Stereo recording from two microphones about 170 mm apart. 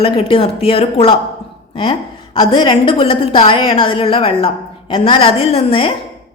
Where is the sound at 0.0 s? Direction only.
35° left (ahead or behind).